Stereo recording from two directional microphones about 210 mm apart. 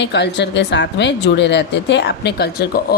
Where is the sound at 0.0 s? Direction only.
55° left (ahead or behind).